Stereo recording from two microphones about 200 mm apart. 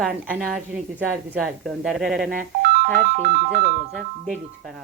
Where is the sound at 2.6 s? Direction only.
55° right (ahead or behind).